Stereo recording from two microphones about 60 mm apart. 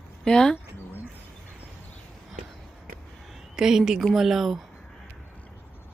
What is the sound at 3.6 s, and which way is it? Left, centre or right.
Speech, centre.